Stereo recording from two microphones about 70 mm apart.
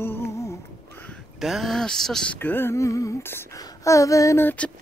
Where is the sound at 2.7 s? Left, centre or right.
Left.